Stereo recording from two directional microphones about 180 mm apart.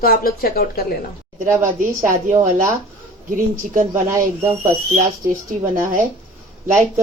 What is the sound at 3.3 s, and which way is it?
Speech, 45° right (ahead or behind).